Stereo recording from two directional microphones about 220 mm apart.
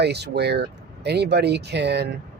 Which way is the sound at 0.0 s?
50° right (ahead or behind).